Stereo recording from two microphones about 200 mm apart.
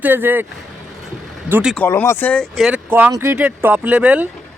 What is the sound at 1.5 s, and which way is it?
Speech, 10° right (ahead or behind).